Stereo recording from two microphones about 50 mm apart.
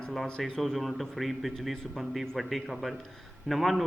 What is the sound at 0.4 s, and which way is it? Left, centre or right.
A man's voice, centre.